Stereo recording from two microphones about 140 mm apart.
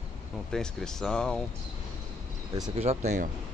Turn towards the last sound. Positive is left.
turn(degrees=-55)  # may be behind; listen again after turning